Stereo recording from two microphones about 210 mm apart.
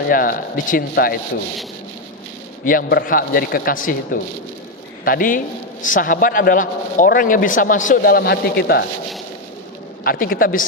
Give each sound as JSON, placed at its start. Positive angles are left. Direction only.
{"t": 0.1, "sound": "a man's voice", "side_deg": 40}
{"t": 2.6, "sound": "a man's voice", "side_deg": 45}
{"t": 10.0, "sound": "a man's voice", "side_deg": 45}